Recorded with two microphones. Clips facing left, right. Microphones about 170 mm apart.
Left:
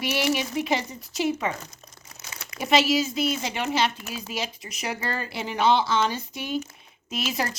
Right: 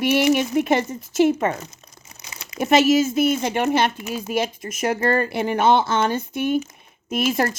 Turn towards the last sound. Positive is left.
turn(degrees=-50)  # may be behind; listen again after turning